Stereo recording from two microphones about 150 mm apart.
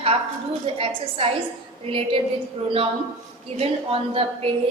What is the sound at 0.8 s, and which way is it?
Speech, 35° right (ahead or behind).